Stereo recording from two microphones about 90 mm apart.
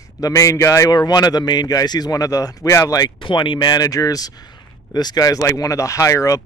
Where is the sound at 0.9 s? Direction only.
50° left (ahead or behind).